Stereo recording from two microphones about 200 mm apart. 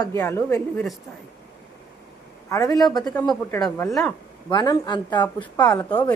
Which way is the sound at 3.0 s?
5° left (ahead or behind).